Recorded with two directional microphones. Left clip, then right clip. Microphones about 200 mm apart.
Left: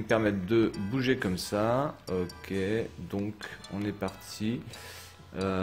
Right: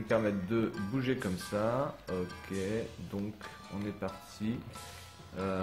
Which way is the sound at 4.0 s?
35° left (ahead or behind).